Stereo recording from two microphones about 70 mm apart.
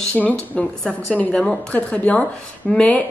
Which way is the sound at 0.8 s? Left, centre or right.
Centre.